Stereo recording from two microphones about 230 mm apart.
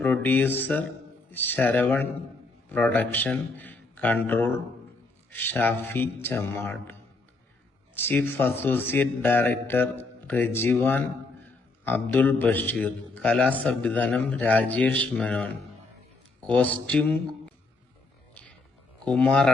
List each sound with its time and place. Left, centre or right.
0.0 s a man's voice: centre
7.9 s a man's voice: centre
19.0 s speech: centre